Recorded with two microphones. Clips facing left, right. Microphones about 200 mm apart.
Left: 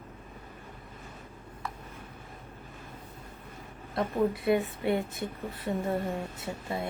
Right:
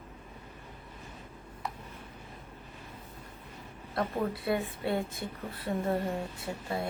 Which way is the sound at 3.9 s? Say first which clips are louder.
Left 4 dB; 20° left (ahead or behind).